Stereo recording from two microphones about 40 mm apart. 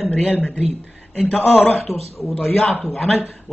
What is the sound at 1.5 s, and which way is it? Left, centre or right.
Speech, left.